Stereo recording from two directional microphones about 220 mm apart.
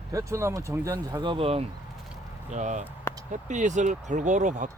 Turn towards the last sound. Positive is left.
turn(degrees=-35)  # may be behind; listen again after turning